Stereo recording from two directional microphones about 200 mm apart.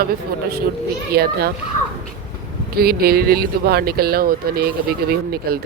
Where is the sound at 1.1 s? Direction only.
50° right (ahead or behind).